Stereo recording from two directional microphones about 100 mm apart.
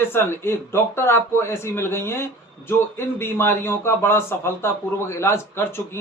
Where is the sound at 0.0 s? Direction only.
25° left (ahead or behind).